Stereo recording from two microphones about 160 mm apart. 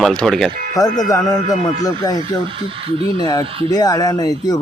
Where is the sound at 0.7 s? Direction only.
25° left (ahead or behind).